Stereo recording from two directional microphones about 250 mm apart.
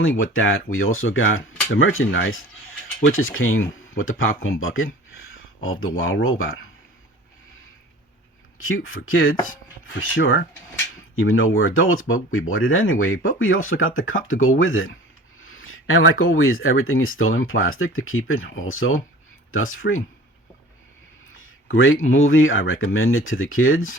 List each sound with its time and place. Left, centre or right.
0.0 s speech: left
4.4 s a sound: left
5.6 s speech: left
8.5 s speech: left
21.3 s a sound: left
22.0 s speech: left